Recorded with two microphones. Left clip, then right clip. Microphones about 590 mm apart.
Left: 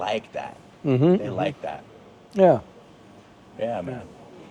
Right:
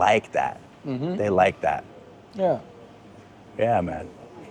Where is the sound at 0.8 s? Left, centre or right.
Left.